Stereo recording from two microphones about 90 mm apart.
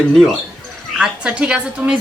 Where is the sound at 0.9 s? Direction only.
10° right (ahead or behind).